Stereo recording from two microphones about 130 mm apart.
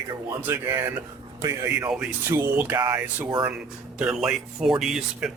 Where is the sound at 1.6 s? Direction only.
10° right (ahead or behind).